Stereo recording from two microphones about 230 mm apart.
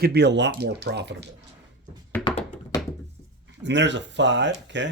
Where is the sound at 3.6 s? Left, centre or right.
Right.